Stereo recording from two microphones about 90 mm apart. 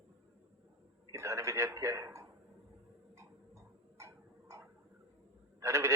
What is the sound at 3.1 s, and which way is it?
Tick-tock, 30° right (ahead or behind).